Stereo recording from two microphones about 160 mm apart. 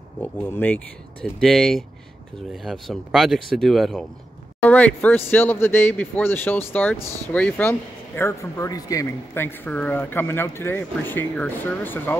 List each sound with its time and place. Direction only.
0.2 s speech: 10° left (ahead or behind)